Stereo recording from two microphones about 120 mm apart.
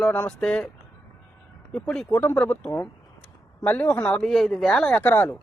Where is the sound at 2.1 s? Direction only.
20° left (ahead or behind).